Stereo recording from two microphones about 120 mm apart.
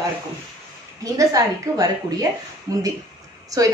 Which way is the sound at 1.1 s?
30° right (ahead or behind).